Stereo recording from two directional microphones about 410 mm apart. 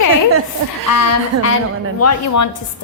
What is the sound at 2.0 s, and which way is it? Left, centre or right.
Speech, left.